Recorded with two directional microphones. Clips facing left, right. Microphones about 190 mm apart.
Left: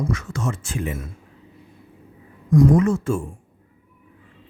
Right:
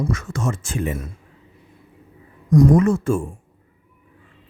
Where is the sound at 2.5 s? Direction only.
40° right (ahead or behind).